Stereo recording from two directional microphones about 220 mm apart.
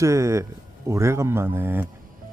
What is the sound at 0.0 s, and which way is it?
Speech, 15° right (ahead or behind).